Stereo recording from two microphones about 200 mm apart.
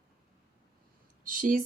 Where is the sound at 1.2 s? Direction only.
45° right (ahead or behind).